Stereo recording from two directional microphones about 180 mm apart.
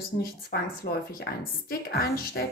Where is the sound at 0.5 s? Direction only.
60° left (ahead or behind).